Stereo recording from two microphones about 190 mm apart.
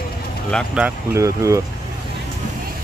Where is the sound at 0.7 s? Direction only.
10° right (ahead or behind).